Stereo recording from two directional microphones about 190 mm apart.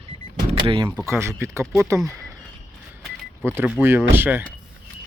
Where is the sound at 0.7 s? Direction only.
25° right (ahead or behind).